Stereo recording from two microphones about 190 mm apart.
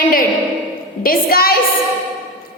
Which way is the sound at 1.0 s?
50° left (ahead or behind).